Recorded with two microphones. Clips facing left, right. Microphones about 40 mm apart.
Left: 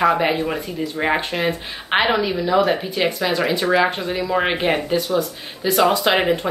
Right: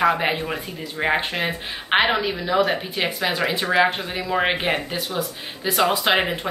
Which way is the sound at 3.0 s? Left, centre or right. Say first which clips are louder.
Left 3 dB; centre.